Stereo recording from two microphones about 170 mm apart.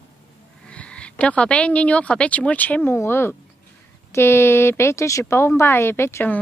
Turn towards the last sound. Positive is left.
turn(degrees=15)  # may be behind; listen again after turning